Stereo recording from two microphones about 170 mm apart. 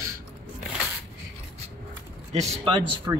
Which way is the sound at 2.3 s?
25° right (ahead or behind).